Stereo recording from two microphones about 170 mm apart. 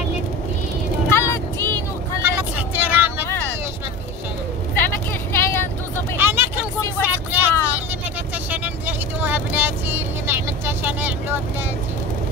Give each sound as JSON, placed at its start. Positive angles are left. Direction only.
{"t": 1.1, "sound": "vehicle", "side_deg": 15}
{"t": 2.2, "sound": "vehicle", "side_deg": -10}
{"t": 3.3, "sound": "vehicle", "side_deg": 10}
{"t": 4.7, "sound": "vehicle", "side_deg": 15}
{"t": 6.1, "sound": "vehicle", "side_deg": -15}